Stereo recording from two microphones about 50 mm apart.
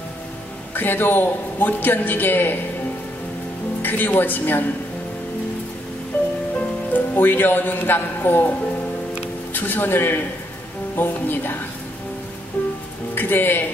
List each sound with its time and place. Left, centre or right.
0.7 s a man's voice: left
3.8 s a man's voice: left
6.1 s music: left
6.9 s a man's voice: left
13.1 s speech: left